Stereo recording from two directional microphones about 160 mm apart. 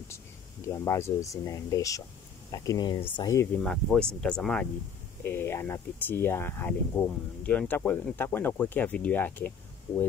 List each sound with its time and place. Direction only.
0.7 s speech: 15° left (ahead or behind)
3.6 s speech: 5° left (ahead or behind)